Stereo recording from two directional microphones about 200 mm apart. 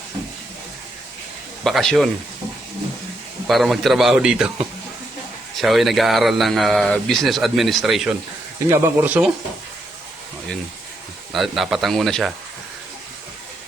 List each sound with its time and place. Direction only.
1.6 s speech: centre (ahead or behind)
3.4 s speech: centre (ahead or behind)
5.5 s speech: centre (ahead or behind)
11.3 s speech: centre (ahead or behind)